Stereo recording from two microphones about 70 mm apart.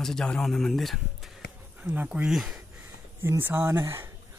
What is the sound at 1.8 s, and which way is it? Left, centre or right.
Speech, right.